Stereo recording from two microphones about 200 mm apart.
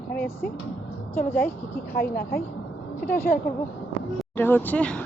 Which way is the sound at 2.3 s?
50° left (ahead or behind).